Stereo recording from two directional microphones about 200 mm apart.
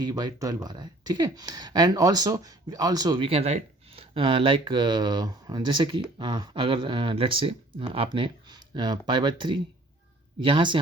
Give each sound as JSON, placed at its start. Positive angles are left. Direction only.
{"t": 0.0, "sound": "speech", "side_deg": -20}